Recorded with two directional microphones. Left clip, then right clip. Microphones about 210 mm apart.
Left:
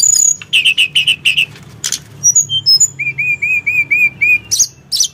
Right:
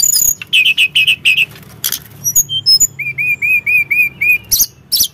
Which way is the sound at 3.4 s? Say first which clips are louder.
Right 4 dB; 15° right (ahead or behind).